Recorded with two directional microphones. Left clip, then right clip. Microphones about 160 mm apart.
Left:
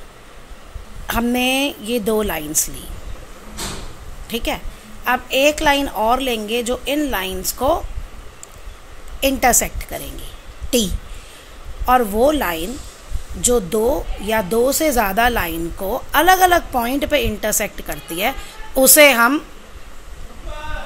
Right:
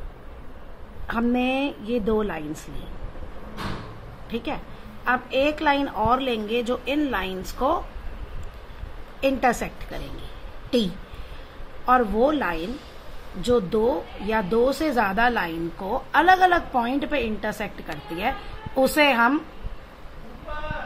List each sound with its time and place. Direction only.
1.0 s a woman's voice: 35° left (ahead or behind)
4.3 s a woman's voice: 35° left (ahead or behind)
9.2 s a woman's voice: 35° left (ahead or behind)
11.8 s a woman's voice: 35° left (ahead or behind)